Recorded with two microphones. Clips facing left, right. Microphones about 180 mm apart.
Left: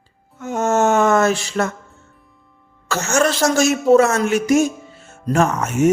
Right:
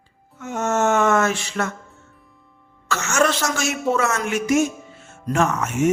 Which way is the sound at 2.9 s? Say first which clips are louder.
Left 2 dB; 35° left (ahead or behind).